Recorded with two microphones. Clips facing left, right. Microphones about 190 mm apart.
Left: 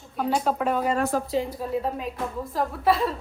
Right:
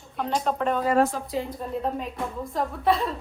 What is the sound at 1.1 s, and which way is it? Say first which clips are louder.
Speech: left 7 dB; 45° left (ahead or behind).